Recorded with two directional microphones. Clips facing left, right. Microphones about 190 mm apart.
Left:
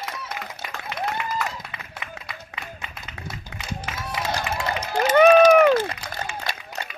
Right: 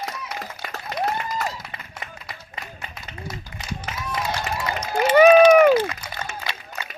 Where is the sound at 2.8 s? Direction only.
40° right (ahead or behind).